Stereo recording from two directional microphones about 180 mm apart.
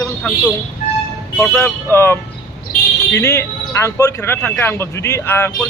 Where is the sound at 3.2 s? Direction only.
15° left (ahead or behind).